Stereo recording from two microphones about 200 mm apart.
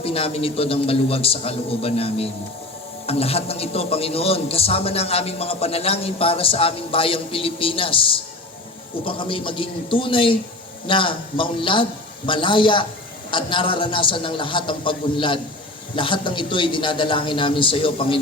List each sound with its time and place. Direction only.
0.0 s a man's voice: 30° left (ahead or behind)